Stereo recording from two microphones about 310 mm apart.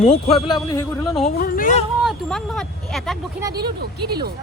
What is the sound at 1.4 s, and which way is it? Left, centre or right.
Speech, left.